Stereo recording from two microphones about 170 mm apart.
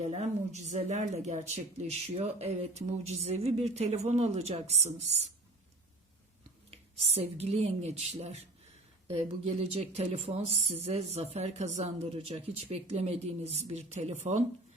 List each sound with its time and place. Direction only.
0.0 s speech: 45° right (ahead or behind)
7.1 s speech: 35° right (ahead or behind)